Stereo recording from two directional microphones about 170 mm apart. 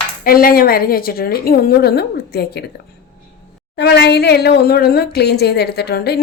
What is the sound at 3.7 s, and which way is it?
A woman's voice, 75° left (ahead or behind).